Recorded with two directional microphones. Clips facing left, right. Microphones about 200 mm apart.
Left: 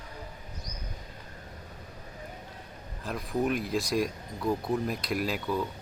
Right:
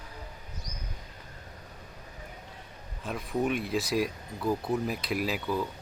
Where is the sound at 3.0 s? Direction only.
Centre (ahead or behind).